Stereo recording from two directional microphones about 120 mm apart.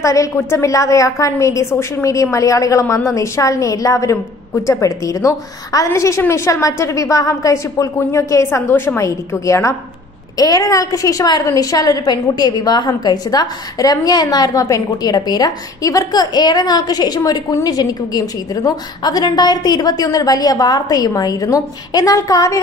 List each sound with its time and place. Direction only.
0.0 s a woman's voice: 25° left (ahead or behind)